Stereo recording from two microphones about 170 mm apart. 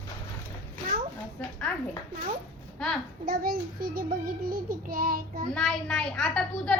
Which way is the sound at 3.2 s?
60° right (ahead or behind).